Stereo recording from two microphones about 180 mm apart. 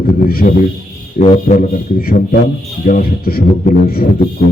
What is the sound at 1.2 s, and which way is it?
A man's voice, 40° left (ahead or behind).